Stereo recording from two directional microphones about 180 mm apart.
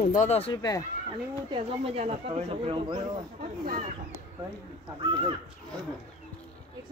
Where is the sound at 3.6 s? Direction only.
50° right (ahead or behind).